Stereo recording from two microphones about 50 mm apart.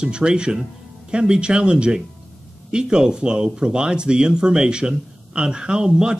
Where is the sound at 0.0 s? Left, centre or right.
Centre.